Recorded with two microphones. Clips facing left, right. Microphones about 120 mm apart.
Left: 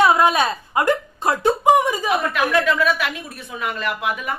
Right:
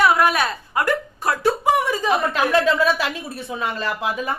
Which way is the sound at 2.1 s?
30° right (ahead or behind).